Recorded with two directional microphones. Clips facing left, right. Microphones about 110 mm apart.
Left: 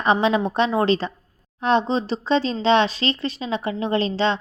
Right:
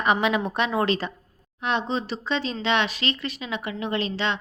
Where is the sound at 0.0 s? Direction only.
30° left (ahead or behind).